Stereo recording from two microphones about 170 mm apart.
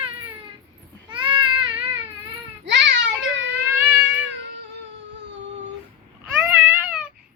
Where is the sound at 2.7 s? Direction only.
90° right.